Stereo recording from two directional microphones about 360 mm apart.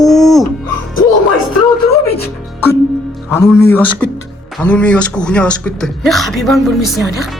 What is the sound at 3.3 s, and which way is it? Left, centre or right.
Speech, centre.